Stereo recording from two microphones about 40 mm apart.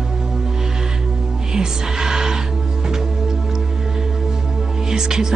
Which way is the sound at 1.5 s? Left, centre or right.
Centre.